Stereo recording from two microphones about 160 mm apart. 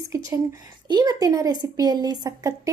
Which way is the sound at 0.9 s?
25° right (ahead or behind).